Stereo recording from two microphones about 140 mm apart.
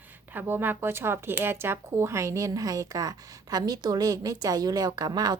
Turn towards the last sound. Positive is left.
turn(degrees=-30)  # may be behind; listen again after turning